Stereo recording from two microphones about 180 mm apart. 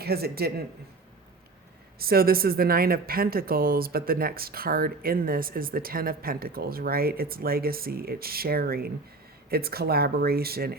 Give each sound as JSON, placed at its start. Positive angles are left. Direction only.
{"t": 0.0, "sound": "speech", "side_deg": -60}
{"t": 2.0, "sound": "speech", "side_deg": -55}